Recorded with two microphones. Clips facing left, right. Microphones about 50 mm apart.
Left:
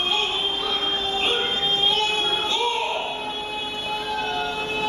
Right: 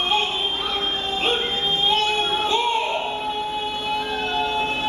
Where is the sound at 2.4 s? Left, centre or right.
Centre.